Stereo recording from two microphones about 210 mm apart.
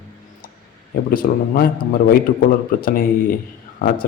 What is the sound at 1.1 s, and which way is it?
A man's voice, 45° left (ahead or behind).